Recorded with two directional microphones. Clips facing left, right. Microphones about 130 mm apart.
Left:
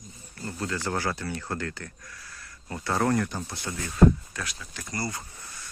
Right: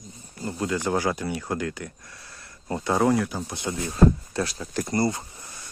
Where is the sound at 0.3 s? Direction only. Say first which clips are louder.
Right 5 dB; 15° right (ahead or behind).